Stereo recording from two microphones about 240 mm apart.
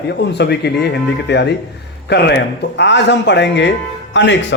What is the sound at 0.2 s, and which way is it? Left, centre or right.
A man's voice, left.